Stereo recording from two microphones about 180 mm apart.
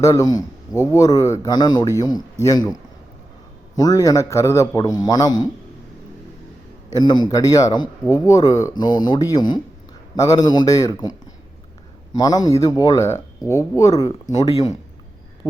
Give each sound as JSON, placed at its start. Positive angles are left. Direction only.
{"t": 0.0, "sound": "a man's voice", "side_deg": 20}
{"t": 3.8, "sound": "a man's voice", "side_deg": 20}
{"t": 6.9, "sound": "a man's voice", "side_deg": 25}
{"t": 12.1, "sound": "a man's voice", "side_deg": 20}